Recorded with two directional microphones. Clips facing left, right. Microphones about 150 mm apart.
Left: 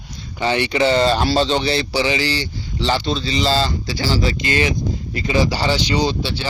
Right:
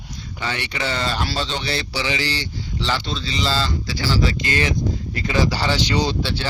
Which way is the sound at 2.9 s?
20° left (ahead or behind).